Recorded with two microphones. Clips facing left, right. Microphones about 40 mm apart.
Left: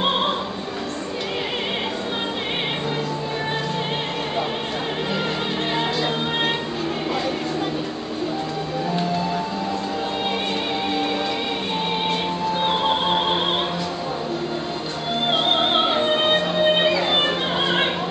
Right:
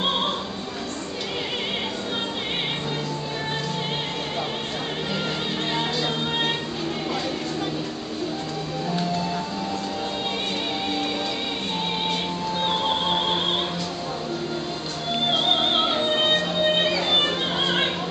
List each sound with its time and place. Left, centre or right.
12.1 s music: centre
15.2 s music: centre